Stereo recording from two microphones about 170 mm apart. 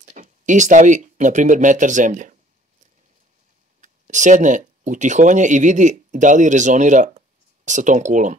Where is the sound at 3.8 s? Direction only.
45° right (ahead or behind).